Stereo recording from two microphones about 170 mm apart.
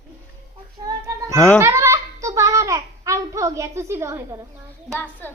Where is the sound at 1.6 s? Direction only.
15° right (ahead or behind).